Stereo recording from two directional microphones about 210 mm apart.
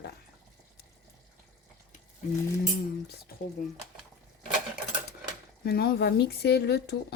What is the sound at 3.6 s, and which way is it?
Speech, 40° left (ahead or behind).